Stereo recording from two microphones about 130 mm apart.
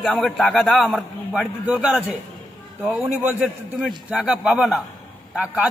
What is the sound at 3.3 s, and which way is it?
A man's voice, 5° right (ahead or behind).